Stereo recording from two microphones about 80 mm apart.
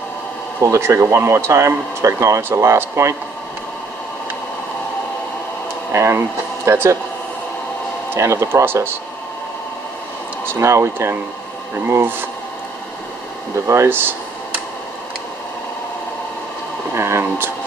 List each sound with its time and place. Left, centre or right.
0.6 s speech: right
5.9 s speech: right
8.1 s speech: right
10.4 s speech: right
13.7 s speech: right
16.9 s a sound: right